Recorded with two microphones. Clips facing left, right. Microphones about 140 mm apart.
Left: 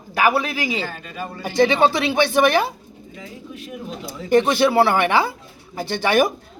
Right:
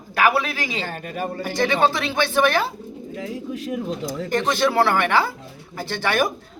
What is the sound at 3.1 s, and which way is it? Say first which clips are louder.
Speech: right 7 dB; 80° right.